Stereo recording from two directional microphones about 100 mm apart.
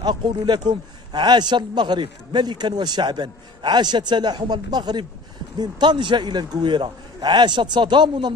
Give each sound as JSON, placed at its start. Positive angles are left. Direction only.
{"t": 0.0, "sound": "a man's voice", "side_deg": -45}